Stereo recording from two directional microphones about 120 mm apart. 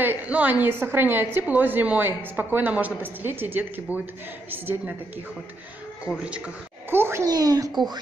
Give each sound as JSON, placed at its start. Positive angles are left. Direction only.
{"t": 0.0, "sound": "a woman's voice", "side_deg": -15}
{"t": 6.2, "sound": "a woman's voice", "side_deg": -10}
{"t": 7.2, "sound": "speech", "side_deg": -30}